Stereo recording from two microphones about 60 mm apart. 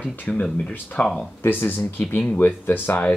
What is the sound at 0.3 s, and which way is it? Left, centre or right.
Speech, centre.